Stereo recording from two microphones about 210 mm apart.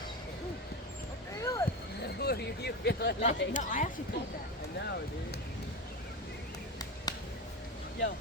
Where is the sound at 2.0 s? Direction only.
50° left (ahead or behind).